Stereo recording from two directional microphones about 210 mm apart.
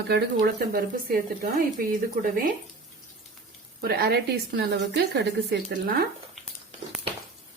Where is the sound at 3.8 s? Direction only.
45° right (ahead or behind).